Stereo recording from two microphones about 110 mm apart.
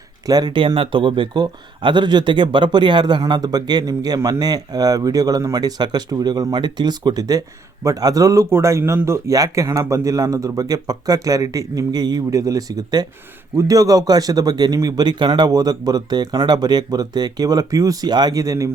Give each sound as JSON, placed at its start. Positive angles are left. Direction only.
{"t": 0.3, "sound": "speech", "side_deg": -40}